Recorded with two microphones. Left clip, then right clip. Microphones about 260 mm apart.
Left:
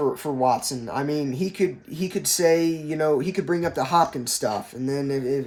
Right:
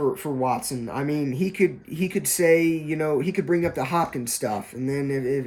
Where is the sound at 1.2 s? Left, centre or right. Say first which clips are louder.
Right 1 dB; centre.